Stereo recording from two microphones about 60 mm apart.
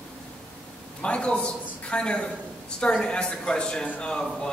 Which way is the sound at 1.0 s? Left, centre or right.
Centre.